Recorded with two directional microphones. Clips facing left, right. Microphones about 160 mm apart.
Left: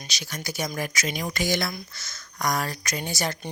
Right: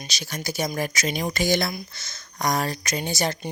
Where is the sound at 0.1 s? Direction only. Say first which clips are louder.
Right 2 dB; 30° right (ahead or behind).